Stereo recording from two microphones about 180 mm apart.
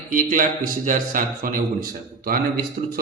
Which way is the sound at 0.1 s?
50° right (ahead or behind).